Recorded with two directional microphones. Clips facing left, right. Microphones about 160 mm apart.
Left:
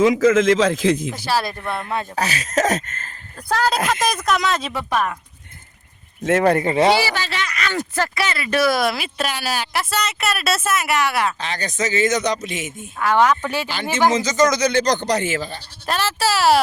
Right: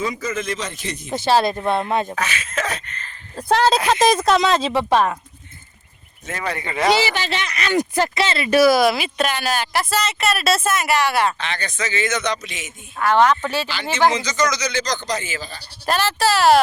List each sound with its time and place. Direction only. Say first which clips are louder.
0.0 s a man's voice: left 11 dB; 90° left
1.1 s speech: right 5 dB; 25° right (ahead or behind)
2.1 s a man's voice: left 4 dB; 40° left (ahead or behind)
3.3 s speech: right 4 dB; 25° right (ahead or behind)
6.4 s speech: left 9 dB; 50° left (ahead or behind)
6.7 s speech: left 4 dB; 30° left (ahead or behind)
6.9 s speech: even; 20° right (ahead or behind)
8.4 s speech: right 5 dB; 5° right (ahead or behind)
11.3 s a man's voice: left 2 dB; 40° left (ahead or behind)
13.0 s speech: right 1 dB; 10° left (ahead or behind)
14.1 s speech: left 4 dB; 45° left (ahead or behind)
14.5 s speech: left 6 dB; 55° left (ahead or behind)
15.9 s speech: right 2 dB; centre (ahead or behind)